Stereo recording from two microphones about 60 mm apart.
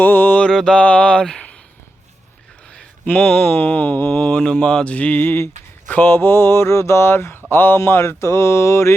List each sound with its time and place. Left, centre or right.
0.0 s mantra: left
0.4 s a sound: centre
3.1 s mantra: left
4.1 s a sound: centre
4.5 s mantra: centre
5.9 s speech: left
7.8 s mantra: left